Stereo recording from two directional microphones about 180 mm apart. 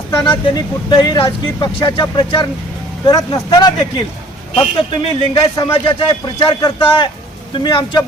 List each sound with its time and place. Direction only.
0.1 s speech: 25° left (ahead or behind)